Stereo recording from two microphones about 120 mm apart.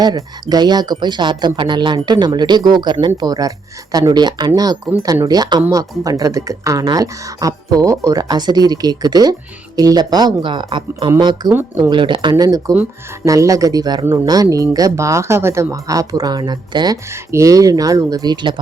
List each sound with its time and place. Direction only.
0.0 s speech: 35° right (ahead or behind)